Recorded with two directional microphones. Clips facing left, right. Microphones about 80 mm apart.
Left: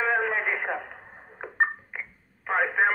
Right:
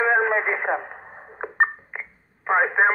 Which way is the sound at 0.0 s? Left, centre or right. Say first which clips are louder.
Right 5 dB; right.